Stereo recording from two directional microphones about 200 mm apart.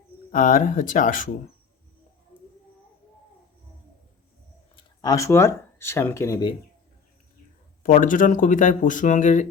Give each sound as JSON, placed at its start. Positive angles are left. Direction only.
{"t": 0.3, "sound": "speech", "side_deg": 40}
{"t": 4.8, "sound": "speech", "side_deg": 15}
{"t": 7.9, "sound": "speech", "side_deg": 40}